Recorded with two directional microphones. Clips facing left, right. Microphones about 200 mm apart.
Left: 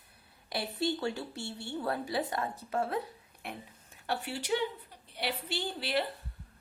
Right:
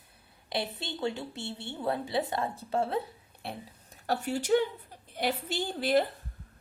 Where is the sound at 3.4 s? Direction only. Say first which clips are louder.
Right 3 dB; 40° right (ahead or behind).